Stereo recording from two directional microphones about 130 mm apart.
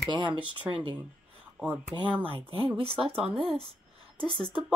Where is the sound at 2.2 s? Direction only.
45° right (ahead or behind).